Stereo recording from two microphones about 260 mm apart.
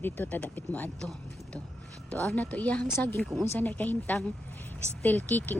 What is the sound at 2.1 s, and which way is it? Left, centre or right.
Speech, centre.